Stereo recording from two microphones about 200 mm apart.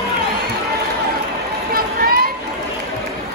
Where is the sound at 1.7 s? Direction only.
45° right (ahead or behind).